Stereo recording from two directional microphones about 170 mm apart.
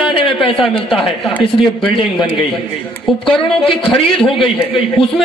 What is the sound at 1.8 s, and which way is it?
Speech, 30° left (ahead or behind).